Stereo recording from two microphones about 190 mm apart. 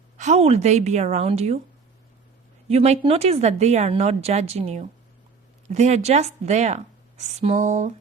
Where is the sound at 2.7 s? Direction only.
35° right (ahead or behind).